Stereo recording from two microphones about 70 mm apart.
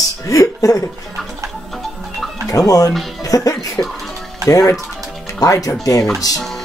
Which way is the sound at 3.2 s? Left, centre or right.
Left.